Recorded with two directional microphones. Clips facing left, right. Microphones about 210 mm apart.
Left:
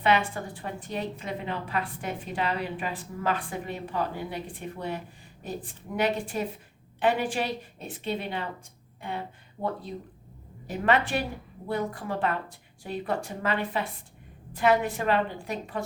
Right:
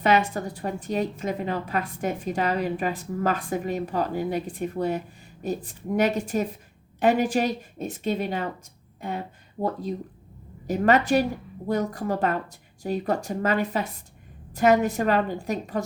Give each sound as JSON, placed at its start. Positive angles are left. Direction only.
{"t": 0.0, "sound": "a woman's voice", "side_deg": -40}